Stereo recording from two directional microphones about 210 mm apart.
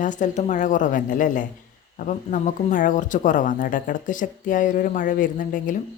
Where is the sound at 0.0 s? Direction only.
35° left (ahead or behind).